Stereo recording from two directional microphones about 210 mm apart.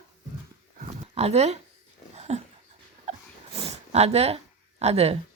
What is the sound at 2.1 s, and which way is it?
Dog, 30° right (ahead or behind).